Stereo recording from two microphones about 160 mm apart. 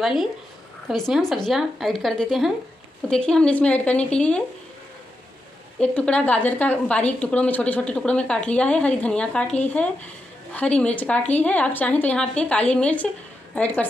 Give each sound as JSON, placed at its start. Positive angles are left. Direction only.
{"t": 0.0, "sound": "a woman's voice", "side_deg": 0}
{"t": 5.8, "sound": "a woman's voice", "side_deg": 10}